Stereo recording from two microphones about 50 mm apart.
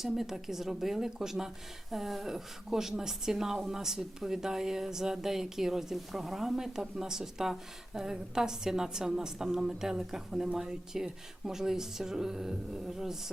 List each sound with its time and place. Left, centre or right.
0.0 s a woman's voice: centre